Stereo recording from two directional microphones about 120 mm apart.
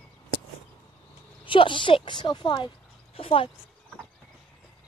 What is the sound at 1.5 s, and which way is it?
Speech, 45° left (ahead or behind).